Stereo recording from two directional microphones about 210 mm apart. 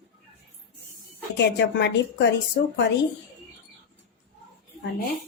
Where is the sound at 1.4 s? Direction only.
55° left (ahead or behind).